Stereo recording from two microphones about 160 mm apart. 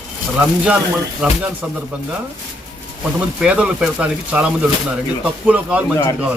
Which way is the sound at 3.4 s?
5° right (ahead or behind).